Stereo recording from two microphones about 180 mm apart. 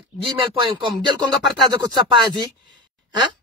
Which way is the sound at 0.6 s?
25° right (ahead or behind).